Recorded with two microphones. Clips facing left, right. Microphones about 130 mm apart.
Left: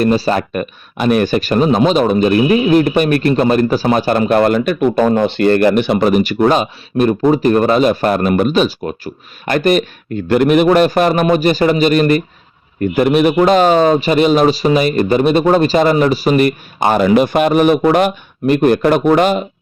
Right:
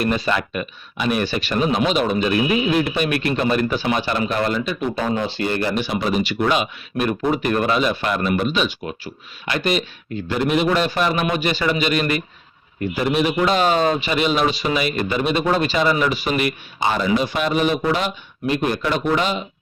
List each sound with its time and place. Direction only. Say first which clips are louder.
0.0 s speech: left 7 dB; 35° left (ahead or behind)
10.2 s speech: left 9 dB; 60° left (ahead or behind); by 12.2 s 45° left (ahead or behind)
12.8 s speech: left 8 dB; 55° left (ahead or behind)